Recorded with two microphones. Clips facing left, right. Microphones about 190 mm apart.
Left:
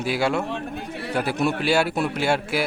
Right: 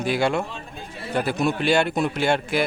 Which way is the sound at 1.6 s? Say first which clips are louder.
Right 1 dB; 5° left (ahead or behind).